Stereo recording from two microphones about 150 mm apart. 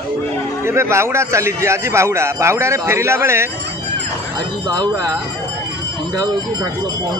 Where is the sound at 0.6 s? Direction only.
15° right (ahead or behind).